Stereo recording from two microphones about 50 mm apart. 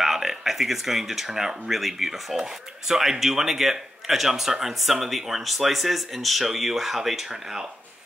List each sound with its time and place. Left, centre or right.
0.0 s speech: centre